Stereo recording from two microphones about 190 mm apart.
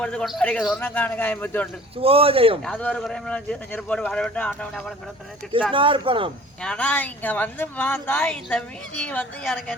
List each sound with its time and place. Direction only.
0.0 s speech: 5° left (ahead or behind)
2.0 s speech: 30° right (ahead or behind)
2.6 s speech: 5° left (ahead or behind)
5.7 s speech: 25° right (ahead or behind)
6.6 s speech: 5° left (ahead or behind)